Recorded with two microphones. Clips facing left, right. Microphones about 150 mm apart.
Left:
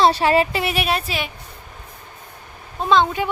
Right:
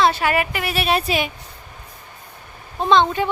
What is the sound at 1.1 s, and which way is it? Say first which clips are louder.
Speech: right 5 dB; 15° right (ahead or behind).